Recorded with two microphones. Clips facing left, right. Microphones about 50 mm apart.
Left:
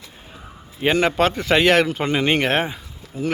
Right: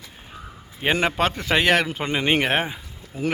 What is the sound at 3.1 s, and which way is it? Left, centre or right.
Speech, right.